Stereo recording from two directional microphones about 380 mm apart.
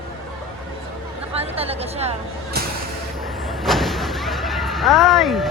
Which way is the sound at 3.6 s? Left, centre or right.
Centre.